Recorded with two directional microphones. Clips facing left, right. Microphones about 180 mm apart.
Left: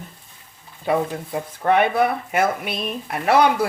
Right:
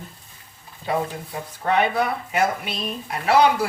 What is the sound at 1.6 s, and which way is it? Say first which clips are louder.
Speech: left 3 dB; 55° left (ahead or behind).